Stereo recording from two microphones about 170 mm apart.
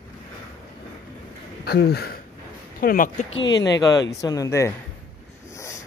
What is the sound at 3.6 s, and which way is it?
Speech, 20° left (ahead or behind).